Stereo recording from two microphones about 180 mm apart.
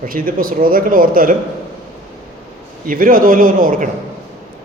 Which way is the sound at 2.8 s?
50° right (ahead or behind).